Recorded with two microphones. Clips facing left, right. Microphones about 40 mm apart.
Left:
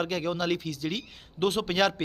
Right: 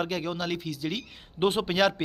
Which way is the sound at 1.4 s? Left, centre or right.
Centre.